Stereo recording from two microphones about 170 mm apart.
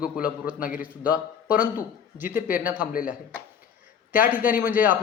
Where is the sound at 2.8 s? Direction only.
55° left (ahead or behind).